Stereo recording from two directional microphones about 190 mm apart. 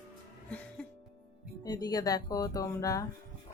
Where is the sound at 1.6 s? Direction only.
20° left (ahead or behind).